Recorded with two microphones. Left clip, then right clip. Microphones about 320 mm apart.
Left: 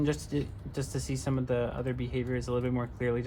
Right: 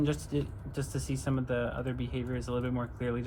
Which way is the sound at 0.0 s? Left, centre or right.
Left.